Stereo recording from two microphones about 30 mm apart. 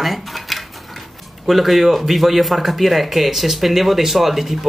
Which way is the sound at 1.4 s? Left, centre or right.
Centre.